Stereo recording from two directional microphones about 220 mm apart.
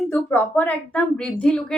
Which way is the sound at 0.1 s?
10° left (ahead or behind).